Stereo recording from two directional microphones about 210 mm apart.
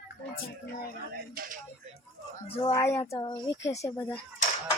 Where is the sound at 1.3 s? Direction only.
40° right (ahead or behind).